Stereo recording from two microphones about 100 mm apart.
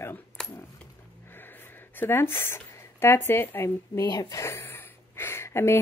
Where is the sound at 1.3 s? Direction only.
20° left (ahead or behind).